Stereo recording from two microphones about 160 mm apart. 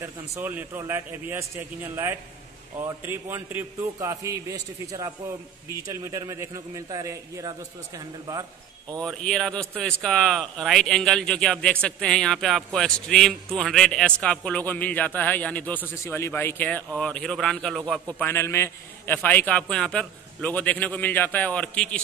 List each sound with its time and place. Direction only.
0.0 s a man's voice: 10° right (ahead or behind)
9.0 s a man's voice: 5° left (ahead or behind)
18.2 s a man's voice: 15° left (ahead or behind)